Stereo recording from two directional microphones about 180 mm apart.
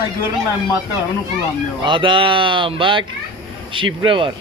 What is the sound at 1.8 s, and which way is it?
Speech, 25° right (ahead or behind).